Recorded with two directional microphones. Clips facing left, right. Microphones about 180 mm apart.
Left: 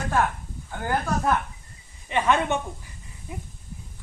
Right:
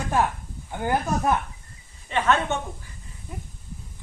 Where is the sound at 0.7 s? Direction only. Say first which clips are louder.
Right 2 dB; 20° right (ahead or behind).